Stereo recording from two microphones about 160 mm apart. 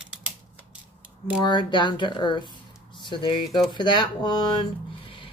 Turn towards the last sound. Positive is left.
turn(degrees=25)  # may be behind; listen again after turning